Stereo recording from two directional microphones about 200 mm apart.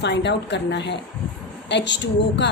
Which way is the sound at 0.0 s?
60° left (ahead or behind).